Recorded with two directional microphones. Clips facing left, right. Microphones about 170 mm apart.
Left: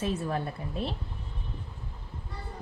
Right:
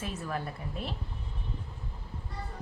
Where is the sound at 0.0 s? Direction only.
30° left (ahead or behind).